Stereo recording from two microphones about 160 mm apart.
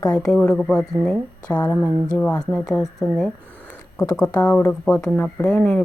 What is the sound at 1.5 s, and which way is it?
Speech, 25° left (ahead or behind).